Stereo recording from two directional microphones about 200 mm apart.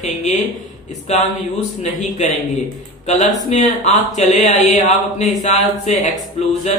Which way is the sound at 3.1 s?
35° left (ahead or behind).